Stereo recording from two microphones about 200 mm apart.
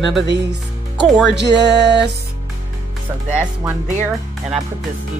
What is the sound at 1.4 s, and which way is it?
Music, 60° right (ahead or behind).